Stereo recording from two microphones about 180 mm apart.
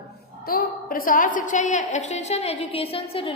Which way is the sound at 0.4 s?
55° left (ahead or behind).